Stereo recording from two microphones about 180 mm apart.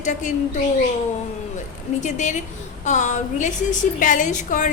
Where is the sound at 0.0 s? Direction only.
45° left (ahead or behind).